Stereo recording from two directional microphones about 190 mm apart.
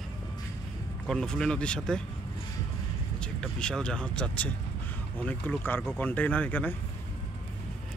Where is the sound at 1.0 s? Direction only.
5° left (ahead or behind).